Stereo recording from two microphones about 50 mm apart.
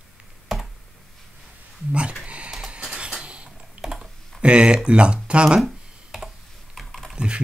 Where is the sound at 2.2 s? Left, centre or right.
Right.